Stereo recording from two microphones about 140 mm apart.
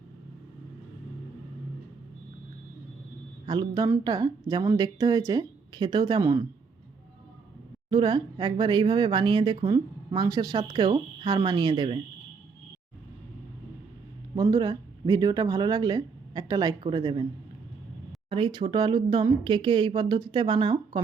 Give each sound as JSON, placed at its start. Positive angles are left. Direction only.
{"t": 3.4, "sound": "a man's voice", "side_deg": -30}
{"t": 7.9, "sound": "speech", "side_deg": -35}
{"t": 14.3, "sound": "a woman's voice", "side_deg": -30}
{"t": 18.3, "sound": "speech", "side_deg": -40}